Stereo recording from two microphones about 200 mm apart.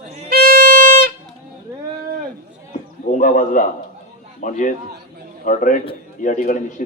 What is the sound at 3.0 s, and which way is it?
A man's voice, 40° left (ahead or behind).